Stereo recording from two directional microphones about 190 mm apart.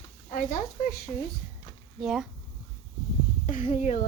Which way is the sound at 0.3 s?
45° left (ahead or behind).